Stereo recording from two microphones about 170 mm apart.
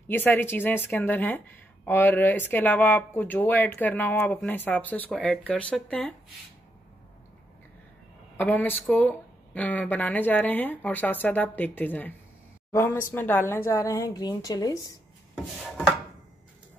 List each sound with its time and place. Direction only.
0.1 s speech: 10° left (ahead or behind)
8.4 s speech: 10° left (ahead or behind)
13.1 s a woman's voice: 10° left (ahead or behind)